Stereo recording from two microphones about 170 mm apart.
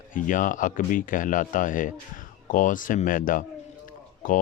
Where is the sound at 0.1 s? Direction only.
50° left (ahead or behind).